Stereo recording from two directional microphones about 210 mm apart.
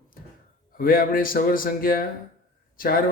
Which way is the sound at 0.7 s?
45° left (ahead or behind).